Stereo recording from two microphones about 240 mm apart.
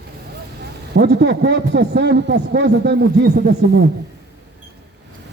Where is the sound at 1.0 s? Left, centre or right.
Right.